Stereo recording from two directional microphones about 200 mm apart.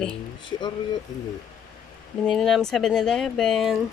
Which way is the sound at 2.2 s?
Centre (ahead or behind).